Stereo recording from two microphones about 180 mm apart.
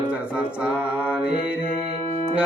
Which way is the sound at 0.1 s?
5° right (ahead or behind).